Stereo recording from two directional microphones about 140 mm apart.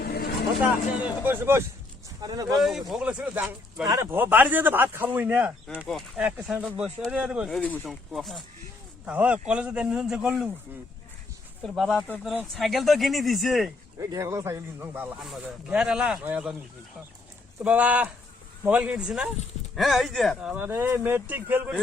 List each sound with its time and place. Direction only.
0.6 s speech: 10° right (ahead or behind)
2.2 s speech: 25° right (ahead or behind)
2.6 s speech: centre (ahead or behind)
9.0 s speech: 10° right (ahead or behind)
11.8 s speech: centre (ahead or behind)
14.0 s speech: 20° right (ahead or behind)
15.2 s speech: centre (ahead or behind)
17.6 s speech: 10° right (ahead or behind)